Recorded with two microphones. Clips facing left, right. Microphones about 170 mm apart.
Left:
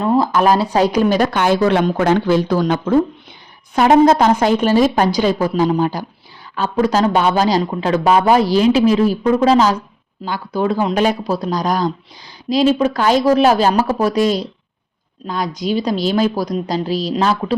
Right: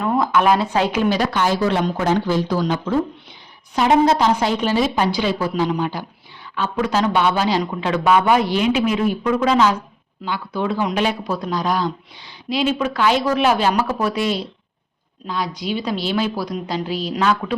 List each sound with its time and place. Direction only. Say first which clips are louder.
0.0 s speech: left 3 dB; 30° left (ahead or behind)